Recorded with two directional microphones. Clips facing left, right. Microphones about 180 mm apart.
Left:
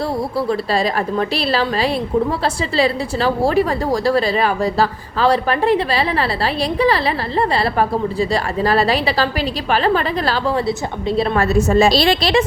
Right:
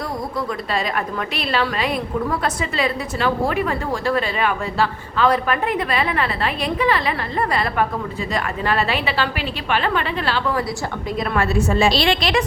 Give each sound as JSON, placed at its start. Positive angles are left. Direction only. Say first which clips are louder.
{"t": 0.3, "sound": "a woman's voice", "louder": "left 5 dB", "side_deg": 30}